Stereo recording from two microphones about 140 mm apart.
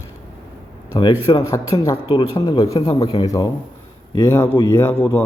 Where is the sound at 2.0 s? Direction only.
35° left (ahead or behind); by 5.2 s 15° left (ahead or behind).